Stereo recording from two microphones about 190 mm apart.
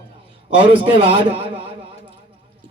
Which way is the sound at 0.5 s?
30° right (ahead or behind).